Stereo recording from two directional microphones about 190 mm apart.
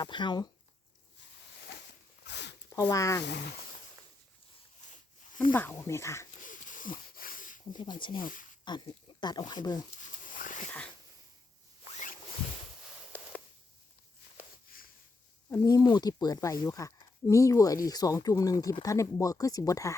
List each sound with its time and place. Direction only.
0.0 s speech: 25° left (ahead or behind)
2.2 s zipper: 65° left (ahead or behind)
2.7 s speech: 15° left (ahead or behind)
4.9 s a sound: 45° left (ahead or behind)
5.5 s speech: 10° left (ahead or behind)
6.4 s a sound: 45° left (ahead or behind)
7.7 s speech: 25° left (ahead or behind)
8.2 s speech: 45° left (ahead or behind)
8.6 s speech: 25° left (ahead or behind)
10.0 s a sound: 45° left (ahead or behind)
10.7 s wheeze: 5° left (ahead or behind)
15.4 s speech: 15° left (ahead or behind)